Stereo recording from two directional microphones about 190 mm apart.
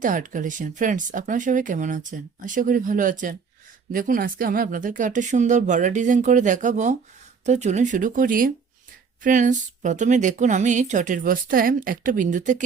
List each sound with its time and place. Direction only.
0.0 s speech: 45° right (ahead or behind)